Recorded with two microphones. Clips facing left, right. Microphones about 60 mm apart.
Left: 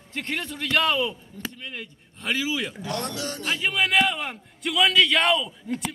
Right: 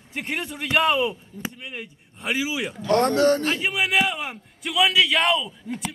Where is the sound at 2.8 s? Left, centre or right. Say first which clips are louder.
Right 12 dB; right.